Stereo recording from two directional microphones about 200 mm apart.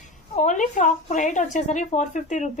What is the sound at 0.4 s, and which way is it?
A woman's voice, 40° left (ahead or behind).